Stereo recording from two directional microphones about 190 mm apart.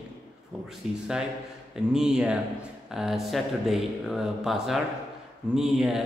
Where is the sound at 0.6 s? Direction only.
5° right (ahead or behind).